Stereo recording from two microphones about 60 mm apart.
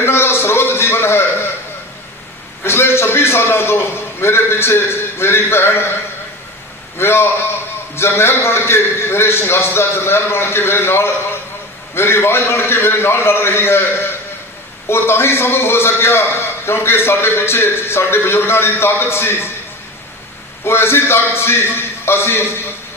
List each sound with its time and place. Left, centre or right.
0.0 s a sound: left
2.6 s a man's voice: left
7.0 s a man's voice: left
20.6 s a man's voice: left